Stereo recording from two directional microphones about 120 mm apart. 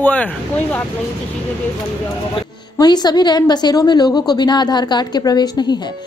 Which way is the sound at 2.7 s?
35° left (ahead or behind).